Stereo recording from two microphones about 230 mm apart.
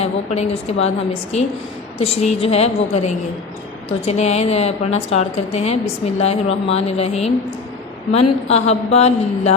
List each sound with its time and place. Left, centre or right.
0.0 s a woman's voice: left